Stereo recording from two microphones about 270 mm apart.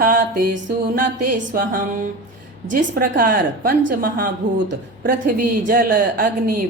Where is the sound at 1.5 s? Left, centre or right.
Right.